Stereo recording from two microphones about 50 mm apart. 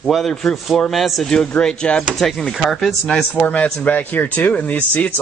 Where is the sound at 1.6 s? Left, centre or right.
Centre.